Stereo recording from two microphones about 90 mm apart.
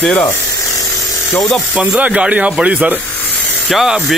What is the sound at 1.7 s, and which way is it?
Speech, 15° right (ahead or behind).